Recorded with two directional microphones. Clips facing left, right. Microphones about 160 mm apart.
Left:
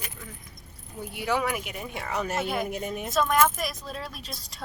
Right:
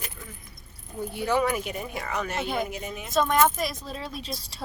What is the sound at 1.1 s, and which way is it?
Speech, 10° left (ahead or behind).